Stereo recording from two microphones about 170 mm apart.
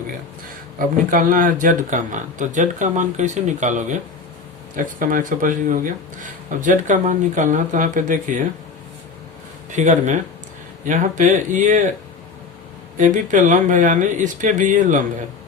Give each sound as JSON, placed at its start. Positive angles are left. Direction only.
{"t": 0.8, "sound": "speech", "side_deg": -50}
{"t": 9.7, "sound": "speech", "side_deg": -45}
{"t": 13.0, "sound": "speech", "side_deg": -50}